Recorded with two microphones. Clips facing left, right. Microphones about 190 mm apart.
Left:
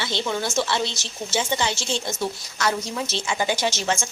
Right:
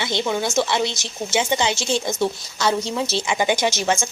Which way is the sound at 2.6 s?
25° right (ahead or behind).